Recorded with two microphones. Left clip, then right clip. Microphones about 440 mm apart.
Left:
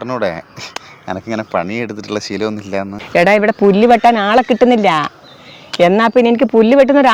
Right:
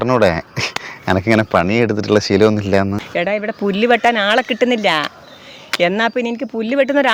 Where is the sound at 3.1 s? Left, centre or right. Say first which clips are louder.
Left 9 dB; left.